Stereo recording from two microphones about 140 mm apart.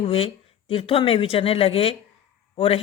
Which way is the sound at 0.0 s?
40° left (ahead or behind).